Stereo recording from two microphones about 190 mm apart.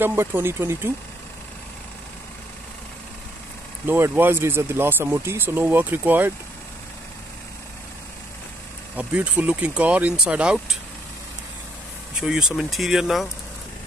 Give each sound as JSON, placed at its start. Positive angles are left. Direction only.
{"t": 0.0, "sound": "speech", "side_deg": -10}
{"t": 3.8, "sound": "speech", "side_deg": -10}
{"t": 8.9, "sound": "speech", "side_deg": -5}
{"t": 12.2, "sound": "speech", "side_deg": -5}